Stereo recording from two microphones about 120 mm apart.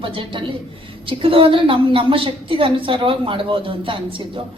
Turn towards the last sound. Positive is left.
turn(degrees=-45)  # may be behind; listen again after turning